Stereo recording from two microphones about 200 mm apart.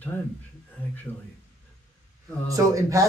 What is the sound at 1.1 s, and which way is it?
Speech, 10° left (ahead or behind).